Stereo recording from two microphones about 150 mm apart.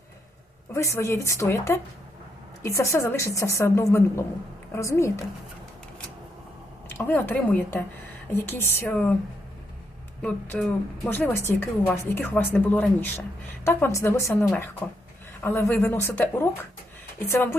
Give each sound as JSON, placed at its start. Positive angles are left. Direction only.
{"t": 0.7, "sound": "a woman's voice", "side_deg": 20}
{"t": 6.8, "sound": "speech", "side_deg": 15}
{"t": 10.2, "sound": "speech", "side_deg": 10}